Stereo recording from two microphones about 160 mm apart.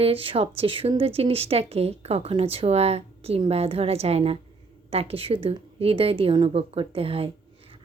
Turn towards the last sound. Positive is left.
turn(degrees=-35)  # may be behind; listen again after turning